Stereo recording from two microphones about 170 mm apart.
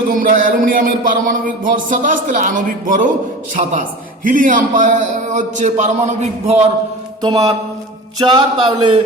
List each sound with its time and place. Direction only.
0.1 s a man's voice: 55° right (ahead or behind)
7.2 s speech: 25° right (ahead or behind)